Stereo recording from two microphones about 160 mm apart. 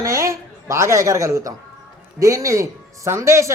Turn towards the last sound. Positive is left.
turn(degrees=-15)  # may be behind; listen again after turning